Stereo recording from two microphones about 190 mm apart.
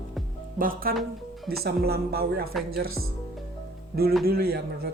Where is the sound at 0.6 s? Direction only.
50° right (ahead or behind).